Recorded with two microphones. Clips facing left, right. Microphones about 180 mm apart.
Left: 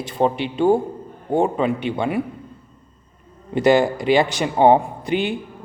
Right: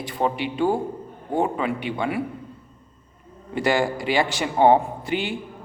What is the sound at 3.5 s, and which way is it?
A man's voice, 20° left (ahead or behind).